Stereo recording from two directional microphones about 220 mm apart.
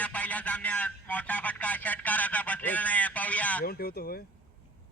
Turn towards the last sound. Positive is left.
turn(degrees=45)  # may be behind; listen again after turning